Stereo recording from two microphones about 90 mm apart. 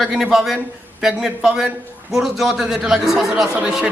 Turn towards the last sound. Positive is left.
turn(degrees=-10)  # may be behind; listen again after turning